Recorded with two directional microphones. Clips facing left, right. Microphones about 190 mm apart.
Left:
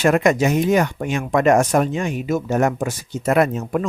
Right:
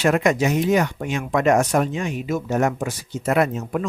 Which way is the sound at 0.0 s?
50° left (ahead or behind).